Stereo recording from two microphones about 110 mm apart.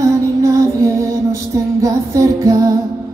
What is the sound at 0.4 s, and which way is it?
Music, 25° right (ahead or behind).